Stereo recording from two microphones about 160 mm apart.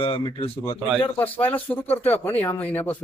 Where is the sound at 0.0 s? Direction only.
35° left (ahead or behind).